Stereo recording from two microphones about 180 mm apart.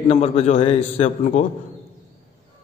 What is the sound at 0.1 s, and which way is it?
A man's voice, 35° left (ahead or behind).